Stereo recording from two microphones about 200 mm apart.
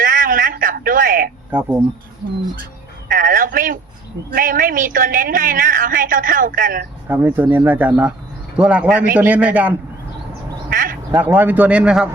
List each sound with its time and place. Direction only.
0.0 s a sound: 40° right (ahead or behind)
1.5 s speech: 10° right (ahead or behind)
3.1 s a man's voice: 40° right (ahead or behind)
7.1 s speech: 10° right (ahead or behind)
10.7 s quack: 45° right (ahead or behind)
11.1 s speech: 10° right (ahead or behind)